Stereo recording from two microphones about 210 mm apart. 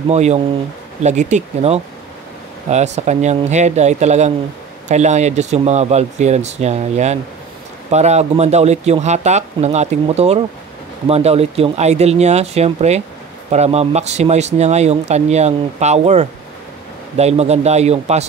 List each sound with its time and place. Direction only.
0.1 s speech: 30° right (ahead or behind)